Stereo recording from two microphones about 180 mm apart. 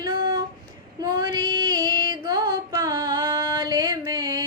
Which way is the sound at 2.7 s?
15° right (ahead or behind).